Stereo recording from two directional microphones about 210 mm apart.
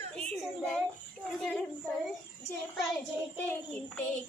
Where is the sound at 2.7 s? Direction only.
Centre (ahead or behind).